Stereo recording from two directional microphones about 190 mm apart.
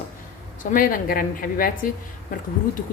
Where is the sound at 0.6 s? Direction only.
45° left (ahead or behind).